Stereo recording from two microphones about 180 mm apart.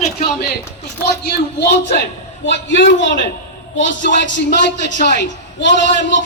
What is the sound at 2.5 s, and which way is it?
Speech, 85° left.